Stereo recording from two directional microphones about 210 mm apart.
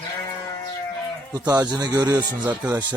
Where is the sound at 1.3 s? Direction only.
15° right (ahead or behind).